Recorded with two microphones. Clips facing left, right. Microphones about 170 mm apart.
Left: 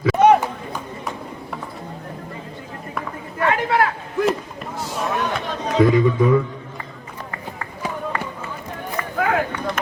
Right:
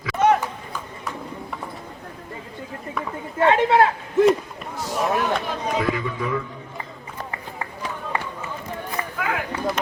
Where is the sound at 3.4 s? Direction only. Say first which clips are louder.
Right 3 dB; 25° right (ahead or behind).